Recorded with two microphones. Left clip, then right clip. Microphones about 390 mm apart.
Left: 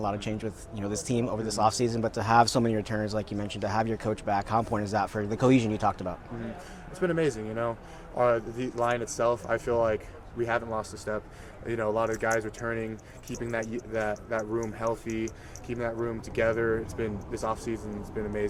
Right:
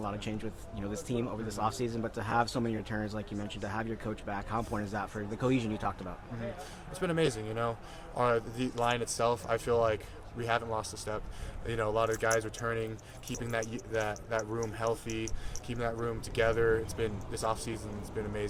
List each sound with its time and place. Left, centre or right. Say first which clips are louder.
0.0 s speech: left 6 dB; centre
7.0 s speech: left 4 dB; right
13.9 s speech: left 3 dB; right
15.0 s speech: left 5 dB; right
15.7 s speech: left 3 dB; right